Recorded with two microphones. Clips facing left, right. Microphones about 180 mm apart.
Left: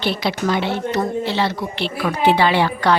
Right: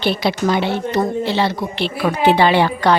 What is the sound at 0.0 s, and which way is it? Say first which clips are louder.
A woman's voice: right 3 dB; 15° right (ahead or behind).